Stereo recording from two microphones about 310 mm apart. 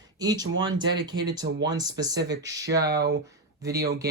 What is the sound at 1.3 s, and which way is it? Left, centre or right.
Speech, centre.